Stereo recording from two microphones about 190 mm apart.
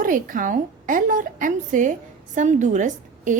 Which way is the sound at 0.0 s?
45° right (ahead or behind).